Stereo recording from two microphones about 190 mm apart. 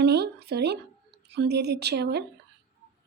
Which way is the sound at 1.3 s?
60° right (ahead or behind).